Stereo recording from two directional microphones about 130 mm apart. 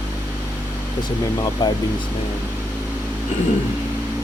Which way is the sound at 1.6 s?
35° left (ahead or behind).